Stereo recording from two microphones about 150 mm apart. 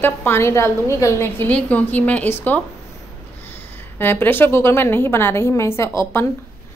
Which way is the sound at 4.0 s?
15° left (ahead or behind).